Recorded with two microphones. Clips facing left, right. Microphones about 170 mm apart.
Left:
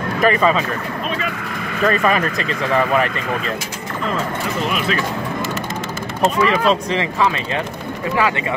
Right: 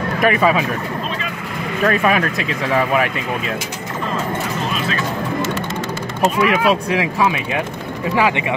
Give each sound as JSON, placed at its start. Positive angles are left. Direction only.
{"t": 0.2, "sound": "speech", "side_deg": -10}
{"t": 1.9, "sound": "speech", "side_deg": -5}
{"t": 6.2, "sound": "speech", "side_deg": -10}